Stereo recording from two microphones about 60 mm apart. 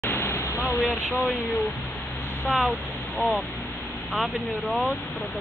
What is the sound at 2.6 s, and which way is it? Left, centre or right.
Speech, left.